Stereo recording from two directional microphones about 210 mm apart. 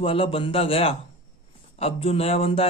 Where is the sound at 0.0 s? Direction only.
25° left (ahead or behind).